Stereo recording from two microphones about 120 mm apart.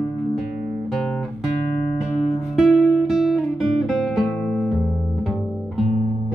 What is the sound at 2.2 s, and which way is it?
Music, 5° right (ahead or behind).